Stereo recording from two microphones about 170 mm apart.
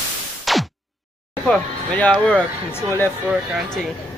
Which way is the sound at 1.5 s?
5° left (ahead or behind).